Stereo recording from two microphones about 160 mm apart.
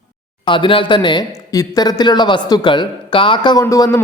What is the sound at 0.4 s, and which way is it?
Speech, 30° left (ahead or behind).